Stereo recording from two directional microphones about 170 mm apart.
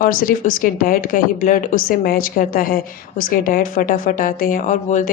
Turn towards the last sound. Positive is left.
turn(degrees=50)  # may be behind; listen again after turning